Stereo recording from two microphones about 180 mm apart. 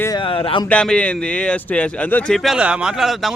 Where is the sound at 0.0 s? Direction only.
25° left (ahead or behind).